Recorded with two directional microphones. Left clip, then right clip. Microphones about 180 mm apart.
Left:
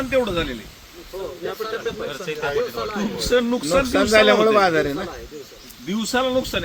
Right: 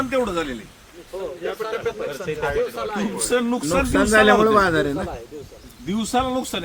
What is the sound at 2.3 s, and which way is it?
Speech, 55° right (ahead or behind).